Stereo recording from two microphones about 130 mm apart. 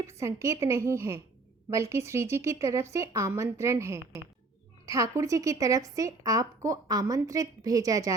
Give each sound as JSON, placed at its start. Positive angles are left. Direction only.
{"t": 0.2, "sound": "a woman's voice", "side_deg": -20}